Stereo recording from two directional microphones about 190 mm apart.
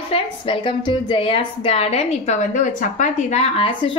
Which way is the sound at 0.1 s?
25° left (ahead or behind).